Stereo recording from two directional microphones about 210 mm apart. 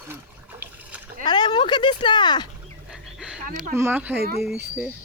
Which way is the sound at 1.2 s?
20° left (ahead or behind).